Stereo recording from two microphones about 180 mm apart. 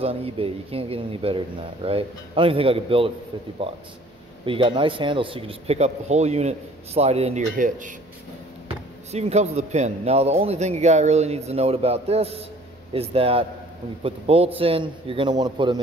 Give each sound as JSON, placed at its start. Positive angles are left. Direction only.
{"t": 0.0, "sound": "speech", "side_deg": -30}
{"t": 4.5, "sound": "speech", "side_deg": -30}
{"t": 8.6, "sound": "a man's voice", "side_deg": -35}